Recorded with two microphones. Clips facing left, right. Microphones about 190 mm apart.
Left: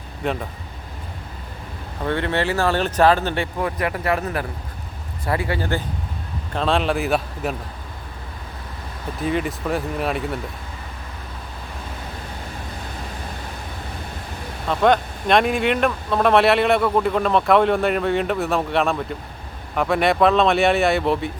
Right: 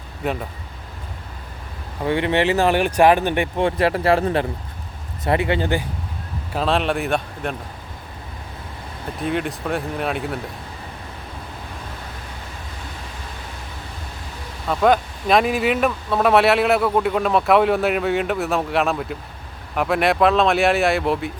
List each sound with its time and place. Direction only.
0.2 s speech: 5° right (ahead or behind)
2.0 s speech: 15° right (ahead or behind)
3.7 s speech: 30° right (ahead or behind)
6.5 s speech: 5° right (ahead or behind)
9.2 s speech: centre (ahead or behind)
14.7 s speech: centre (ahead or behind)